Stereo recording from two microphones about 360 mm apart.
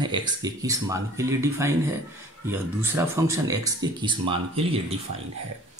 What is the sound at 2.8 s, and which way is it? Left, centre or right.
Speech, centre.